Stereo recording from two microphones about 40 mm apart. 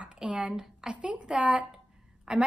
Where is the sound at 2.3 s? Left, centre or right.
Centre.